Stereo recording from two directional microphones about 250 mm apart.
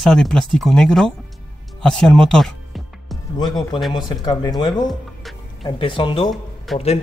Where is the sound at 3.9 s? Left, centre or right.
Centre.